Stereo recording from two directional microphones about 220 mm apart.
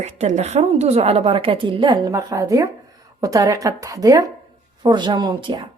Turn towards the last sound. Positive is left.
turn(degrees=-20)  # may be behind; listen again after turning